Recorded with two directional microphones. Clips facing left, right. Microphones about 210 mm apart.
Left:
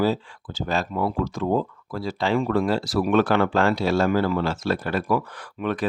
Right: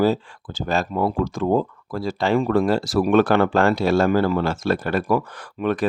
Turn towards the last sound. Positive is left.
turn(degrees=-45)  # may be behind; listen again after turning